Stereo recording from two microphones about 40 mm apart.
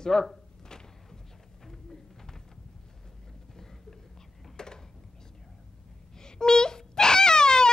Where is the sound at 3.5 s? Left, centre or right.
Centre.